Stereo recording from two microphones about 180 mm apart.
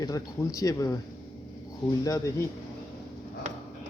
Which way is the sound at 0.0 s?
20° left (ahead or behind).